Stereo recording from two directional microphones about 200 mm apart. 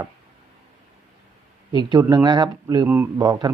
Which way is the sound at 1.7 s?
20° right (ahead or behind).